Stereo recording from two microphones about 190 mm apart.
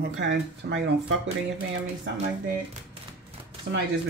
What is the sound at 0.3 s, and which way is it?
Speech, 70° right (ahead or behind).